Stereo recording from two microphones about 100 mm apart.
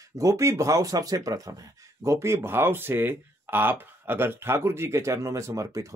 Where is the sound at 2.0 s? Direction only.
25° right (ahead or behind).